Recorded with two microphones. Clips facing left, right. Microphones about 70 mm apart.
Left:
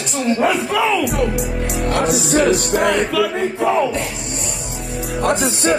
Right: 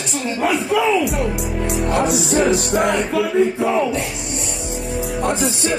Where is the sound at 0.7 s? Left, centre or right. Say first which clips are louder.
Right 1 dB; left.